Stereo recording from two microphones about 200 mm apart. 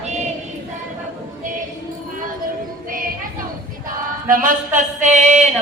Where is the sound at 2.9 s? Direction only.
45° right (ahead or behind).